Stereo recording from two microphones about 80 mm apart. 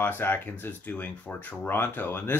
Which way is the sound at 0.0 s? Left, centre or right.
Left.